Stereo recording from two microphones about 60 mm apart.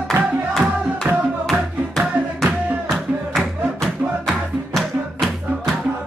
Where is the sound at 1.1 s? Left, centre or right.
Right.